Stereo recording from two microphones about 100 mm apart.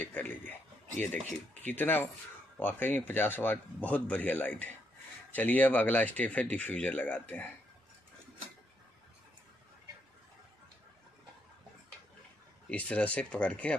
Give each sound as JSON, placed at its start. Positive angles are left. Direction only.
{"t": 0.0, "sound": "speech", "side_deg": 15}
{"t": 12.6, "sound": "speech", "side_deg": 15}